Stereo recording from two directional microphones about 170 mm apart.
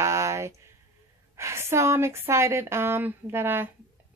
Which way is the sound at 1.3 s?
15° right (ahead or behind).